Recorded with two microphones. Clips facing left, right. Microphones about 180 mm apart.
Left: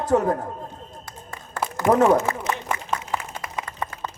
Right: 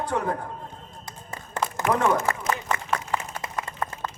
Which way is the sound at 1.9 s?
40° left (ahead or behind).